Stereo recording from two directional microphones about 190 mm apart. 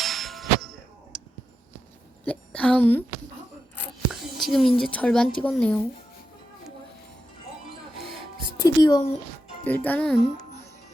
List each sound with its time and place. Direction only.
0.0 s clang: centre (ahead or behind)
2.2 s a woman's voice: 5° left (ahead or behind)
4.1 s a woman's voice: centre (ahead or behind)
8.5 s music: 20° left (ahead or behind)
9.6 s a child's voice: 10° left (ahead or behind)